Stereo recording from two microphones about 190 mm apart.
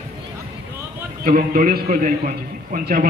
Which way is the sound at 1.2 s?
50° right (ahead or behind).